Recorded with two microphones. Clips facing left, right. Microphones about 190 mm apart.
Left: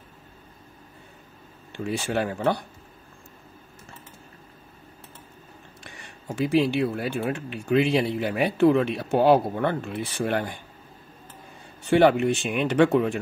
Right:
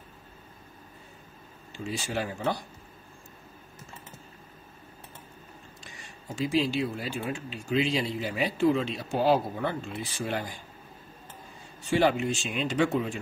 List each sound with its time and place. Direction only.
1.7 s speech: 60° left (ahead or behind)
5.9 s speech: 60° left (ahead or behind)
11.8 s speech: 60° left (ahead or behind)